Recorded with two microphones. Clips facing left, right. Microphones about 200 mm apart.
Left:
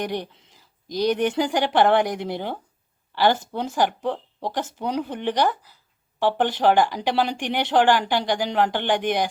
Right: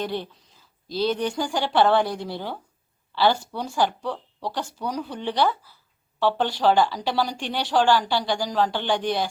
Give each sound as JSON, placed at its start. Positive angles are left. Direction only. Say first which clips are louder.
{"t": 0.0, "sound": "speech", "louder": "left 1 dB", "side_deg": 15}